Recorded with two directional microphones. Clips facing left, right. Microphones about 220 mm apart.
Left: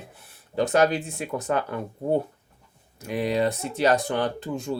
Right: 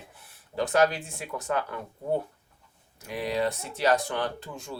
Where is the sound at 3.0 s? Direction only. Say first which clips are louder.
Left 4 dB; 20° left (ahead or behind).